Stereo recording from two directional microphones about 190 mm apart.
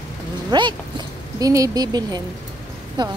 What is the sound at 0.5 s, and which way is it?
A woman's voice, 25° right (ahead or behind).